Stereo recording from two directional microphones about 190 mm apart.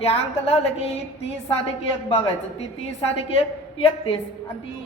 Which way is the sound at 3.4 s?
30° left (ahead or behind).